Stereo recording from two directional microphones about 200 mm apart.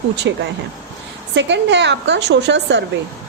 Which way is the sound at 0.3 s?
60° right (ahead or behind).